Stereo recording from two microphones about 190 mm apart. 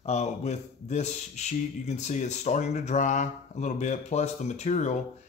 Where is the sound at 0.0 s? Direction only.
35° left (ahead or behind).